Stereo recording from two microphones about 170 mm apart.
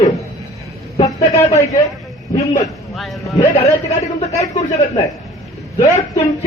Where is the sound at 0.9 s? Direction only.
35° left (ahead or behind).